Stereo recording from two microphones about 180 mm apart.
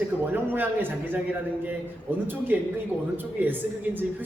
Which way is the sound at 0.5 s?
10° right (ahead or behind).